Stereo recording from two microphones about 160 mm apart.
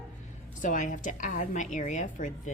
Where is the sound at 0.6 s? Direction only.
50° left (ahead or behind).